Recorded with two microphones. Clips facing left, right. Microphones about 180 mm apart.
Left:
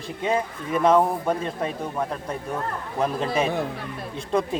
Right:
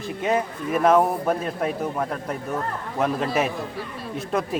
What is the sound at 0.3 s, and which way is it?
Speech, 5° right (ahead or behind).